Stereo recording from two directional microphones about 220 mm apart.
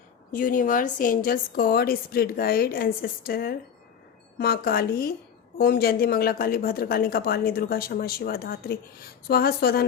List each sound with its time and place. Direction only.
0.3 s a woman's voice: 40° left (ahead or behind)